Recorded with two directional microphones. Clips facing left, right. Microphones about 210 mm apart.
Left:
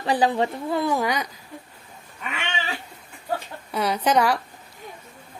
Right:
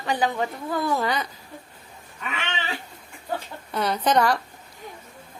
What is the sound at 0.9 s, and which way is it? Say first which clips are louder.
Speech: left 1 dB; 10° left (ahead or behind).